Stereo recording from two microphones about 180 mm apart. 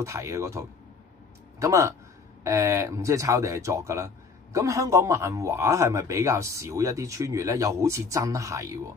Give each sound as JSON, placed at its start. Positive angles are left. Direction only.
{"t": 0.0, "sound": "speech", "side_deg": -15}